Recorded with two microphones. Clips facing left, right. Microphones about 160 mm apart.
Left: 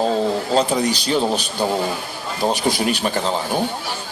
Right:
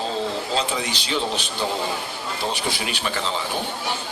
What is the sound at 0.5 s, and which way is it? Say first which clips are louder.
A man's voice: left 7 dB; 40° left (ahead or behind).